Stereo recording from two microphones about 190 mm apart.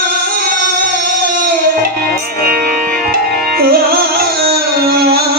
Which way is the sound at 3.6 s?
55° right (ahead or behind).